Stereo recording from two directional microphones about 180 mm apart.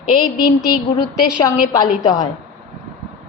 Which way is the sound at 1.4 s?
20° left (ahead or behind).